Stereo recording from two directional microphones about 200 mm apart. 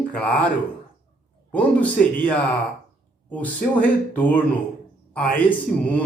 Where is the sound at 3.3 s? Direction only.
10° left (ahead or behind).